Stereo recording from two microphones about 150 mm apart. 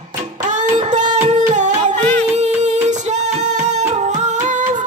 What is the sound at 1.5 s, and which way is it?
Music, 55° right (ahead or behind).